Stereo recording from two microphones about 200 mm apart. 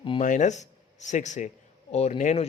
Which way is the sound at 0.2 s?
40° left (ahead or behind).